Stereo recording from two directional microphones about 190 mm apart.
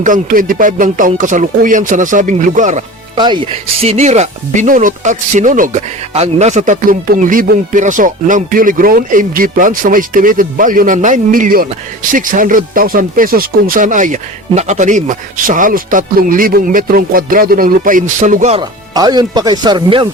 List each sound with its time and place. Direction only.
0.0 s speech: 45° right (ahead or behind)
3.2 s speech: 25° right (ahead or behind)
18.6 s speech: 20° right (ahead or behind)